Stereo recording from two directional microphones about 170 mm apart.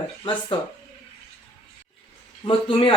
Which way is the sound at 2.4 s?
30° left (ahead or behind).